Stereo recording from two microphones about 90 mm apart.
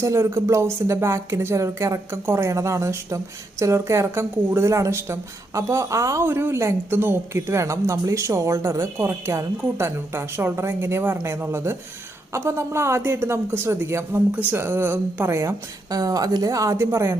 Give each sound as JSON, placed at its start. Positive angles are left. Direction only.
{"t": 0.0, "sound": "a woman's voice", "side_deg": -30}